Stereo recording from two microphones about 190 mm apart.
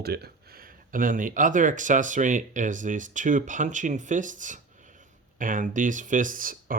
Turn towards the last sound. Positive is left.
turn(degrees=-45)  # may be behind; listen again after turning